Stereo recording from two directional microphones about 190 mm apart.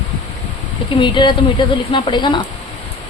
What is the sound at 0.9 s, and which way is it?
A woman's voice, 25° left (ahead or behind).